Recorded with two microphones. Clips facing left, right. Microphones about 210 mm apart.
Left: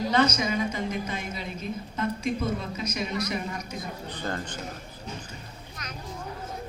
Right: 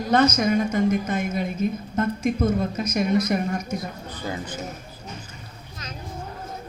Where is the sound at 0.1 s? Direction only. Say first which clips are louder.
Right 8 dB; 45° right (ahead or behind).